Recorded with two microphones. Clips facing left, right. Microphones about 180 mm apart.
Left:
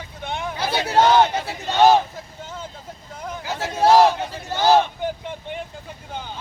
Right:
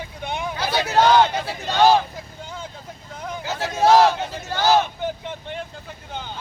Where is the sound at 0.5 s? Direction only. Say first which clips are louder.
Left 1 dB; 25° left (ahead or behind).